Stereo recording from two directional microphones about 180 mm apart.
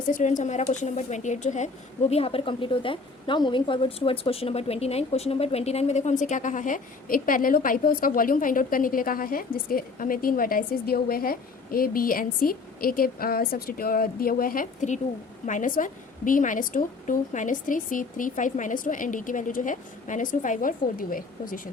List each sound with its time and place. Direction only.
0.1 s a woman's voice: 45° left (ahead or behind)